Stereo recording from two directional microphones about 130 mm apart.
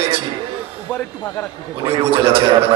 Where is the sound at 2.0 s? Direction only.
45° right (ahead or behind).